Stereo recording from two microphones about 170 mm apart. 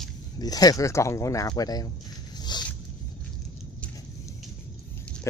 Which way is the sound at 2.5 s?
25° left (ahead or behind).